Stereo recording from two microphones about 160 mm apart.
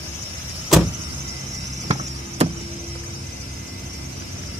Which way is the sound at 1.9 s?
40° right (ahead or behind).